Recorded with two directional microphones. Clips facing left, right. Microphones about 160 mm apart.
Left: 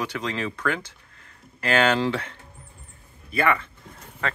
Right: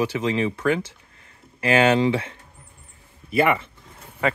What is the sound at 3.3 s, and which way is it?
A man's voice, 20° right (ahead or behind).